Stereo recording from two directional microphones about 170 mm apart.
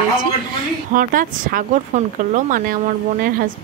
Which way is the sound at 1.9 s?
50° right (ahead or behind).